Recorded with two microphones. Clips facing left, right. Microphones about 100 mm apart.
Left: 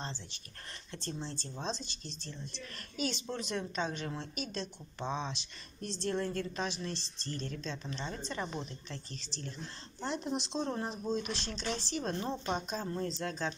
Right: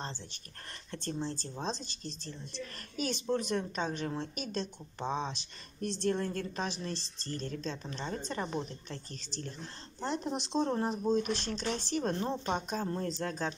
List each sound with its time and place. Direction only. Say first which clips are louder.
0.9 s speech: right 4 dB; 45° right (ahead or behind)